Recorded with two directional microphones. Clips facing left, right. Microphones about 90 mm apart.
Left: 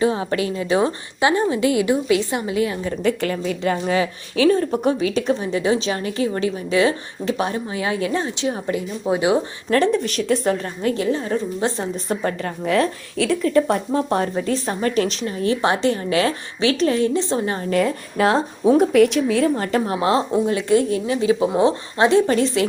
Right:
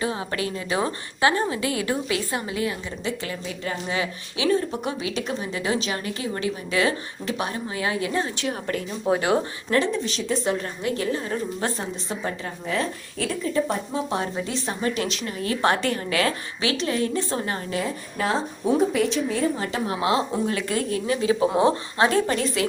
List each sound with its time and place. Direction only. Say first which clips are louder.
0.0 s a woman's voice: left 7 dB; 30° left (ahead or behind)
2.8 s a woman's voice: left 9 dB; 55° left (ahead or behind); by 3.8 s 80° left
3.8 s a woman's voice: left 7 dB; 40° left (ahead or behind); by 9.4 s 15° left (ahead or behind)
9.6 s a woman's voice: left 7 dB; 55° left (ahead or behind)
10.9 s a woman's voice: left 3 dB; 25° left (ahead or behind)
12.6 s speech: left 8 dB; 85° left; by 14.0 s 70° left (ahead or behind)
14.1 s a woman's voice: left 6 dB; 45° left (ahead or behind)
15.6 s a woman's voice: even; 20° left (ahead or behind)
17.2 s a woman's voice: left 5 dB; 25° left (ahead or behind)
17.7 s a woman's voice: left 11 dB; 55° left (ahead or behind)
18.2 s speech: left 8 dB; 90° left
18.6 s speech: left 8 dB; 65° left (ahead or behind)
19.6 s a woman's voice: left 5 dB; 40° left (ahead or behind)